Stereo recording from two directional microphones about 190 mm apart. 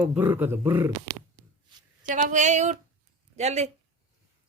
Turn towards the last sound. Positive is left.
turn(degrees=-35)  # may be behind; listen again after turning